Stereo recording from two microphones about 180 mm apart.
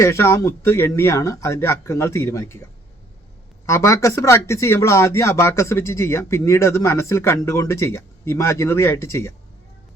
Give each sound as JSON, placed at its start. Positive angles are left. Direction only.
{"t": 0.0, "sound": "speech", "side_deg": 15}
{"t": 3.7, "sound": "speech", "side_deg": 15}